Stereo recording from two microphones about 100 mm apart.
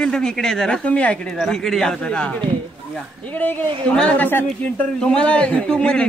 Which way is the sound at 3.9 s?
10° left (ahead or behind).